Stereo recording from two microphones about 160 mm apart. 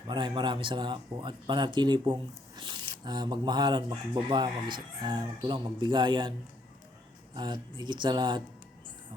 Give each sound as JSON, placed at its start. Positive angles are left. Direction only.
{"t": 0.1, "sound": "speech", "side_deg": -30}
{"t": 7.3, "sound": "speech", "side_deg": -30}